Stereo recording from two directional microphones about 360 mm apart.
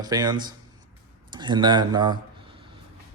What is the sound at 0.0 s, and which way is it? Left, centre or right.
Speech, centre.